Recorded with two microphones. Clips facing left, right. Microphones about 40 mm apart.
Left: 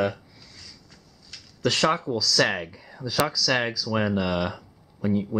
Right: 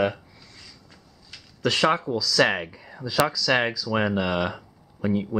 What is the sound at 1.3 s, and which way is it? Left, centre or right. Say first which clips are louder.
Speech: even; centre.